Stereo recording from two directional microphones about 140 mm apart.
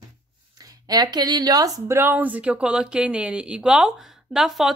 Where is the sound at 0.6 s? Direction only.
30° right (ahead or behind).